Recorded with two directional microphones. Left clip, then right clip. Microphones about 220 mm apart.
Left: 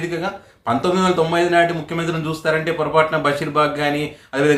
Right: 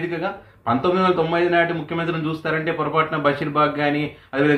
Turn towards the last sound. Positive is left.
turn(degrees=5)  # may be behind; listen again after turning